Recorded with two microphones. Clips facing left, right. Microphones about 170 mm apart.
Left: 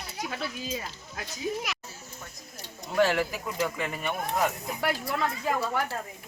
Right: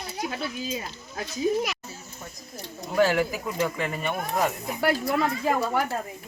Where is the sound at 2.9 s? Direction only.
5° right (ahead or behind).